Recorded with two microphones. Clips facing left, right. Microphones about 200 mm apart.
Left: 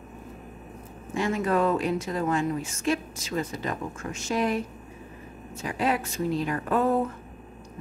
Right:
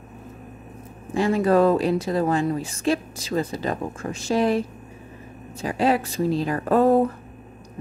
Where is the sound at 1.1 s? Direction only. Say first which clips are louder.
Right 6 dB; 35° right (ahead or behind).